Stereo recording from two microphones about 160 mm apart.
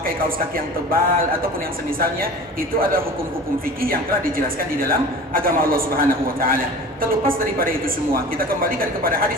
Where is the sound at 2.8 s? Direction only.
65° right (ahead or behind).